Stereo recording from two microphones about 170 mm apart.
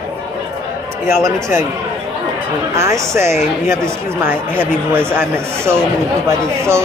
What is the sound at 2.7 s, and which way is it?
Speech, 15° right (ahead or behind).